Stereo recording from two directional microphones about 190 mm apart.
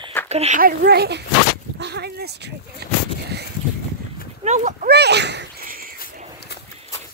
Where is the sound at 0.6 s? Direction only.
55° right (ahead or behind).